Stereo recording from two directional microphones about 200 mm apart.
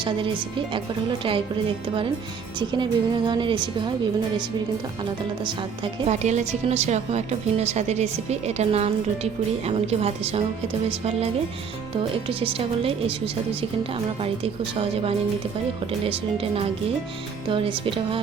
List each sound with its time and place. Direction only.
0.0 s speech: 25° right (ahead or behind)
2.6 s speech: 25° right (ahead or behind)
5.4 s a woman's voice: 25° right (ahead or behind)